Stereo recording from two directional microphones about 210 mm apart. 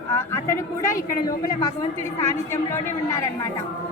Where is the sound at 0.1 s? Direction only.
10° left (ahead or behind).